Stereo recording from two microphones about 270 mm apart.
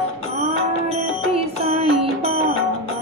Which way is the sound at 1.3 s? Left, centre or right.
Right.